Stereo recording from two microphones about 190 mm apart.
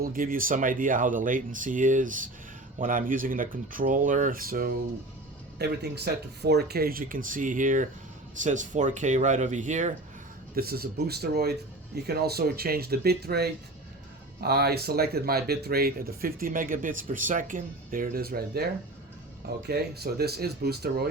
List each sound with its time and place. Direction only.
0.0 s speech: 50° right (ahead or behind)
10.5 s speech: 55° right (ahead or behind)